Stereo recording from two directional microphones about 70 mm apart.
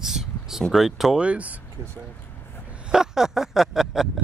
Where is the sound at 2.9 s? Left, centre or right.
Centre.